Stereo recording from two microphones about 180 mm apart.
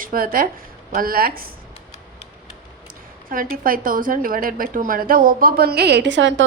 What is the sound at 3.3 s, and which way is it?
A woman's voice, 50° right (ahead or behind).